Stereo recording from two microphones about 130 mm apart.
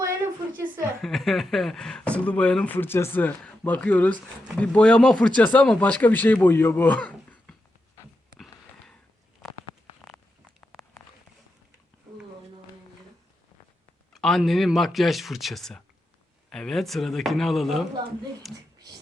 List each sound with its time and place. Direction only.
0.0 s a sound: 20° right (ahead or behind)
1.0 s speech: centre (ahead or behind)
14.1 s speech: 5° left (ahead or behind)